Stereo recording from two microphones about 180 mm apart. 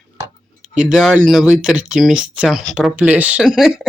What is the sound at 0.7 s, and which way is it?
Speech, 5° right (ahead or behind).